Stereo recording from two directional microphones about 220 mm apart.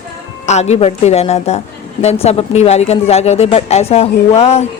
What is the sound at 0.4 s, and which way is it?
A woman's voice, 30° left (ahead or behind).